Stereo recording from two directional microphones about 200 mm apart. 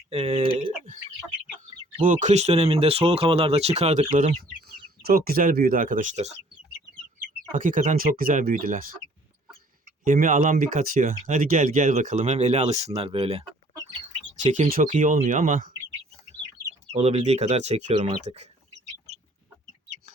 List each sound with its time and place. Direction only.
0.1 s speech: 30° right (ahead or behind)
2.0 s speech: 40° right (ahead or behind)
5.0 s speech: 50° right (ahead or behind)
7.5 s speech: 40° right (ahead or behind)
10.0 s speech: 40° right (ahead or behind)
14.4 s speech: 35° right (ahead or behind)
16.9 s speech: 30° right (ahead or behind)